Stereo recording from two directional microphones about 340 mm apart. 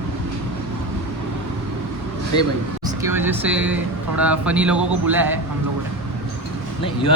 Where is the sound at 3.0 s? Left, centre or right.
Centre.